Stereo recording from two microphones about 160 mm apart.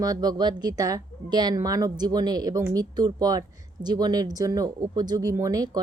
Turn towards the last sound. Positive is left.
turn(degrees=-25)  # may be behind; listen again after turning